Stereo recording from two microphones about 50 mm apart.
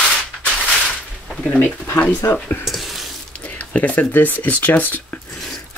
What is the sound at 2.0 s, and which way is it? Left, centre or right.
Speech, left.